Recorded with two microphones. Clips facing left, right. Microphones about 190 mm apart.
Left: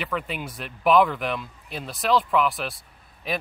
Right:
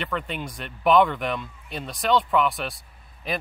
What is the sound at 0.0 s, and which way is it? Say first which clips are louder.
Speech: even; 5° left (ahead or behind).